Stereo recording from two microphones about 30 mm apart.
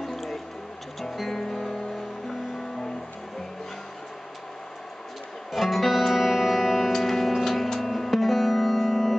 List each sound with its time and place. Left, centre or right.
0.0 s music: centre
1.4 s music: centre
5.5 s music: centre